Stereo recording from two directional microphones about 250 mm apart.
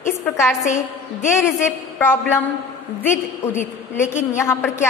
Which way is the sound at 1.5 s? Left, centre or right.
Centre.